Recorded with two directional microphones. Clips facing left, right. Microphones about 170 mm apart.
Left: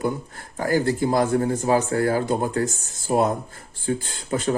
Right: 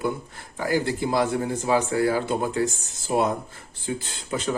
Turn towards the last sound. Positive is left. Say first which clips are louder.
# left 4 dB
turn(degrees=45)  # may be behind; listen again after turning